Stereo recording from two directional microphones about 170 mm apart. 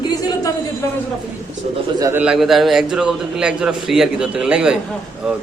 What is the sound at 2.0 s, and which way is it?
Speech, 20° right (ahead or behind).